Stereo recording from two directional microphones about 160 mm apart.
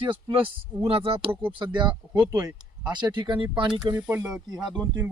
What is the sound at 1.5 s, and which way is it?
Speech, 30° right (ahead or behind).